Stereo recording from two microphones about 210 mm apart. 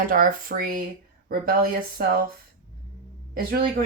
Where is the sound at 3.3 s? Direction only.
45° right (ahead or behind).